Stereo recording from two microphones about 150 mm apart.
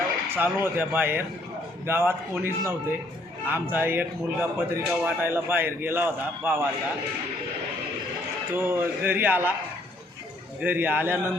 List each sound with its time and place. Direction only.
0.3 s speech: 15° right (ahead or behind)
8.5 s speech: 15° right (ahead or behind)
10.6 s speech: 10° right (ahead or behind)